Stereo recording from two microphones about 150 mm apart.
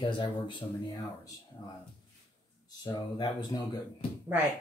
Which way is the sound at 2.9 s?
30° left (ahead or behind).